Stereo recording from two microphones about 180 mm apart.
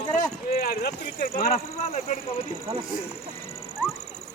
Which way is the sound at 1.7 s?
35° left (ahead or behind).